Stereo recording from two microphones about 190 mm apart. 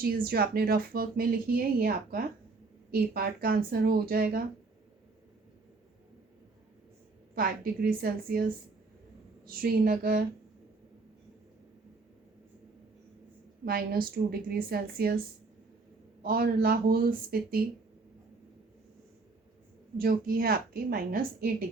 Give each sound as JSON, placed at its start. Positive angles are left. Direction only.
{"t": 0.0, "sound": "speech", "side_deg": -50}
{"t": 7.3, "sound": "speech", "side_deg": -50}
{"t": 9.5, "sound": "speech", "side_deg": -50}
{"t": 13.7, "sound": "speech", "side_deg": -55}
{"t": 16.2, "sound": "speech", "side_deg": -50}
{"t": 20.0, "sound": "speech", "side_deg": -50}